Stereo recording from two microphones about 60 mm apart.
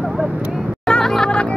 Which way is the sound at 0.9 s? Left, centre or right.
Centre.